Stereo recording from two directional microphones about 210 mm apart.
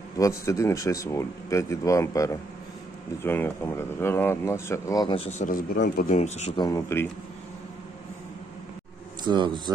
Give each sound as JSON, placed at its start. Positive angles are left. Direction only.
{"t": 0.2, "sound": "speech", "side_deg": 15}
{"t": 6.6, "sound": "speech", "side_deg": 15}
{"t": 9.2, "sound": "speech", "side_deg": -20}